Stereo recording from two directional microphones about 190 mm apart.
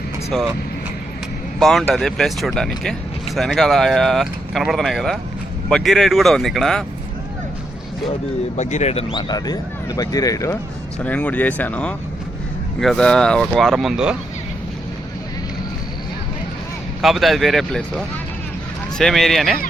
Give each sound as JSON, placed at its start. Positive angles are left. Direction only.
{"t": 0.3, "sound": "speech", "side_deg": 0}
{"t": 1.5, "sound": "speech", "side_deg": 0}
{"t": 8.5, "sound": "speech", "side_deg": 35}
{"t": 9.1, "sound": "speech", "side_deg": 20}
{"t": 17.0, "sound": "speech", "side_deg": 0}